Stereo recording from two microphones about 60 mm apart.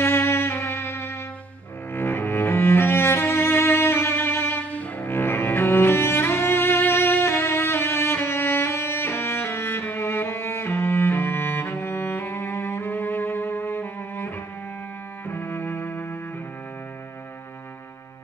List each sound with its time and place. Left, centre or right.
0.0 s music: left
2.0 s cello: left
4.6 s cello: left
15.2 s music: left